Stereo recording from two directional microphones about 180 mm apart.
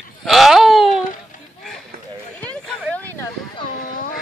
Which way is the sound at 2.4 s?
10° left (ahead or behind).